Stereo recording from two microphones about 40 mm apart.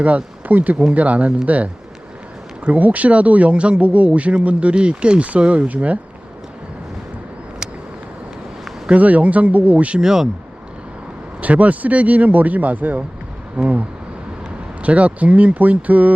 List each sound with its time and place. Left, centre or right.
0.4 s speech: right
2.7 s speech: right
8.9 s speech: right
10.0 s speech: centre
11.3 s speech: right